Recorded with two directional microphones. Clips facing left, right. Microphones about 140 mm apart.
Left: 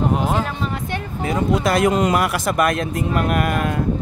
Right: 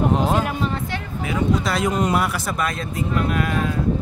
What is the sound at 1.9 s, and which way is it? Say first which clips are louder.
Speech: left 3 dB; 90° left.